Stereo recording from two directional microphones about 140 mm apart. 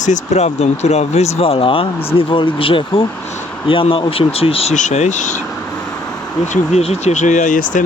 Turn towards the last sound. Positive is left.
turn(degrees=70)  # may be behind; listen again after turning